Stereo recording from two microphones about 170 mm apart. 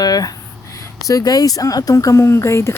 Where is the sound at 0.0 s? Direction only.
20° left (ahead or behind).